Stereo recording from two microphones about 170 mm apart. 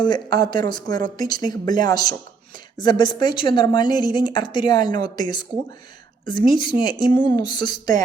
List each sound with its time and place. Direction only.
0.0 s speech: 25° left (ahead or behind)